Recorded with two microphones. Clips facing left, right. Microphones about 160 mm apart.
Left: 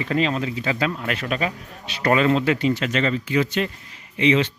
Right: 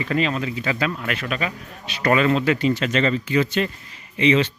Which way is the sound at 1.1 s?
35° left (ahead or behind).